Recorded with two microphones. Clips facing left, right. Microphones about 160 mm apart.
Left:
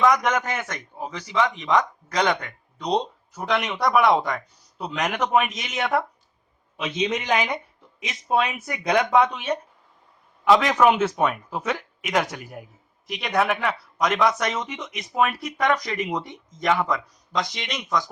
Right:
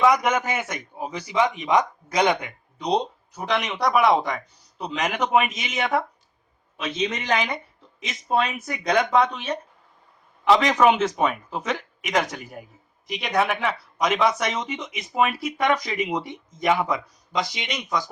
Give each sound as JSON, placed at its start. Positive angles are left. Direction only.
{"t": 0.0, "sound": "a man's voice", "side_deg": -5}
{"t": 6.7, "sound": "a man's voice", "side_deg": 15}